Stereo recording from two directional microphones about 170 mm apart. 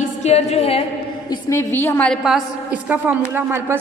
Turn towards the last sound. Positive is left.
turn(degrees=-10)  # may be behind; listen again after turning